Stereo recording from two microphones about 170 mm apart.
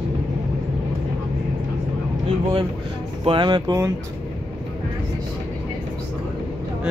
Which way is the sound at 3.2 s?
30° right (ahead or behind).